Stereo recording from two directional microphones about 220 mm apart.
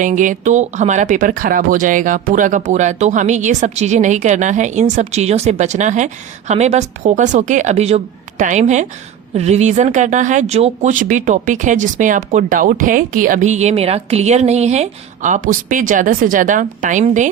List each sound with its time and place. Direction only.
0.0 s speech: 35° right (ahead or behind)